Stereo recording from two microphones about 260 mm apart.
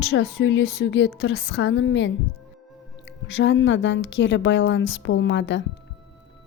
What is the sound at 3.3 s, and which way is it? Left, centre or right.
A woman's voice, left.